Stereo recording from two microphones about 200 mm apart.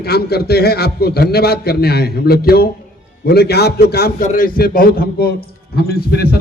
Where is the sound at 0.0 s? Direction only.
50° left (ahead or behind).